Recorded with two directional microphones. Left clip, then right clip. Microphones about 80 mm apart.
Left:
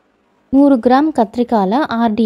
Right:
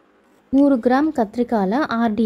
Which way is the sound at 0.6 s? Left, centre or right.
Left.